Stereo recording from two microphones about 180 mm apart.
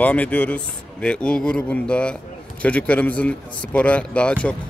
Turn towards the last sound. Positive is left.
turn(degrees=5)  # may be behind; listen again after turning